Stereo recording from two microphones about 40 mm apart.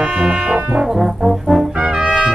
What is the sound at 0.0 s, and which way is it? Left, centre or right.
Brass instrument, right.